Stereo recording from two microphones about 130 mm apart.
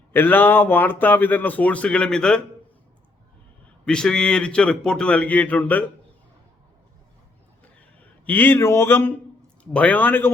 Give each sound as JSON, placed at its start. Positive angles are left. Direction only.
{"t": 0.1, "sound": "speech", "side_deg": 15}
{"t": 3.8, "sound": "speech", "side_deg": 5}
{"t": 8.3, "sound": "speech", "side_deg": 15}